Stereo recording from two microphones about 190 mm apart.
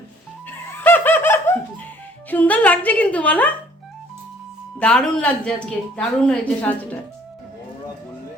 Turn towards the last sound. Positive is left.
turn(degrees=10)  # may be behind; listen again after turning